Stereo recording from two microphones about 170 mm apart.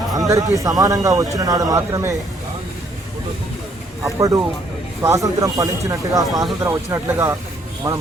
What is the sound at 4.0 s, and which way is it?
Speech, 20° right (ahead or behind).